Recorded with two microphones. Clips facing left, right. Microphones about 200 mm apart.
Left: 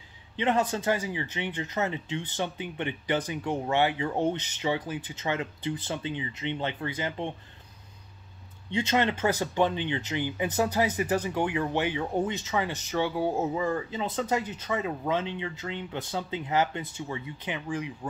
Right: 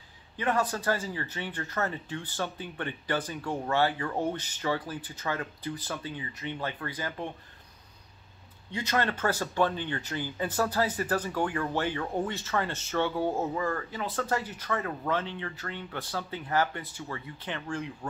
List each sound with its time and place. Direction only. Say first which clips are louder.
0.4 s speech: left 3 dB; 25° left (ahead or behind)
8.7 s speech: left 4 dB; 20° left (ahead or behind)
17.6 s speech: left 2 dB; 10° left (ahead or behind)